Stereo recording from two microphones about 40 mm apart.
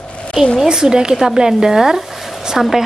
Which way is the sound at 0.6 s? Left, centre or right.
Centre.